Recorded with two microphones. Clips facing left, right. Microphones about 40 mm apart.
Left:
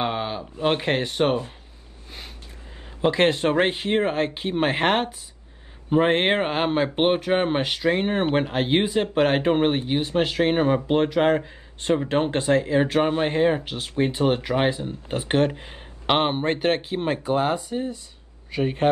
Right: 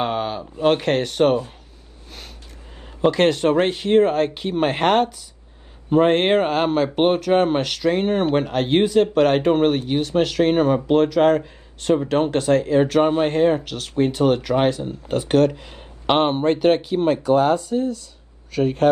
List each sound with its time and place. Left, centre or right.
0.0 s a sound: centre
0.7 s speech: centre
3.1 s speech: left
13.0 s speech: centre
16.1 s speech: centre
16.5 s speech: left